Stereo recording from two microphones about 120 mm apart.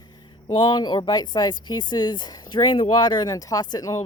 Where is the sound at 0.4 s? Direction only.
40° left (ahead or behind).